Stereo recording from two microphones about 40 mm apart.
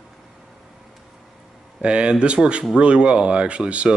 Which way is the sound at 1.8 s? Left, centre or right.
Right.